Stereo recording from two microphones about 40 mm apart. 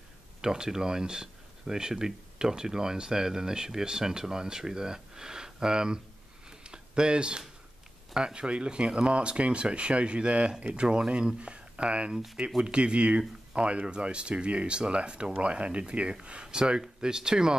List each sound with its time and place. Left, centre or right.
0.4 s speech: centre
6.6 s a sound: right
8.1 s speech: right
12.1 s speech: centre
12.6 s speech: right